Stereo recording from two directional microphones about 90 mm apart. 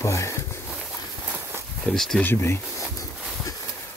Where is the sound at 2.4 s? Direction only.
30° left (ahead or behind).